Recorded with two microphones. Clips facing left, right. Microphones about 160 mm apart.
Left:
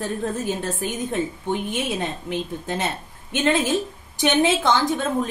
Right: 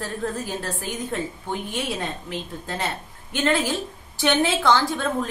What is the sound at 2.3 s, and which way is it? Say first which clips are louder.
A woman's voice: left 5 dB; 20° left (ahead or behind).